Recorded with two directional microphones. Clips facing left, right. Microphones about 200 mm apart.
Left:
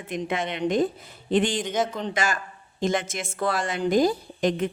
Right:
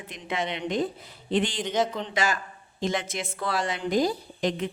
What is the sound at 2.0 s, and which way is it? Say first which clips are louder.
Speech: left 1 dB; 50° left (ahead or behind).